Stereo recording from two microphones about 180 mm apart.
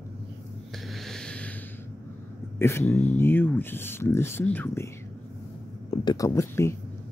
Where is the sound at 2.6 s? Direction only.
15° left (ahead or behind).